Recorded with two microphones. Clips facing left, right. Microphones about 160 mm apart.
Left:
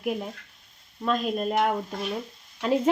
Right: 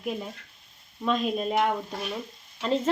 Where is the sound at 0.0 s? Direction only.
10° left (ahead or behind).